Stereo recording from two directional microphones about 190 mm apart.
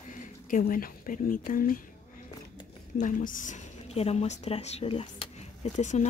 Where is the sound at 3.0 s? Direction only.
40° left (ahead or behind).